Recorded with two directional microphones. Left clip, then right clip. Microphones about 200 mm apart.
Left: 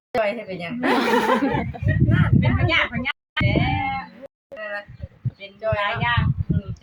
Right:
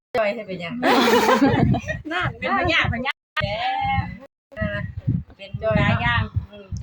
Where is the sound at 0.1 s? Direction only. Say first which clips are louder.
Even; centre (ahead or behind).